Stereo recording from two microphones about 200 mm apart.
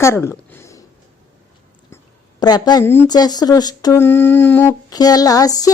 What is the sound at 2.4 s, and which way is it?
Speech, 20° left (ahead or behind).